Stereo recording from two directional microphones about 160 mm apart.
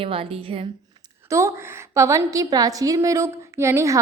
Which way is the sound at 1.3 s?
20° right (ahead or behind).